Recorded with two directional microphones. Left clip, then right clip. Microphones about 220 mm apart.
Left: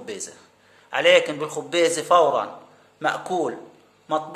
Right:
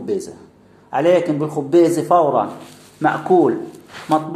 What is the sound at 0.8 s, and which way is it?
A man's voice, 15° left (ahead or behind).